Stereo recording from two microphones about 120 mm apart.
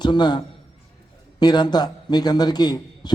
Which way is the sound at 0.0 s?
40° left (ahead or behind).